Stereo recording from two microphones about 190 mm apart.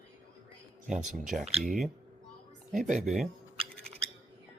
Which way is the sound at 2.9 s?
40° right (ahead or behind).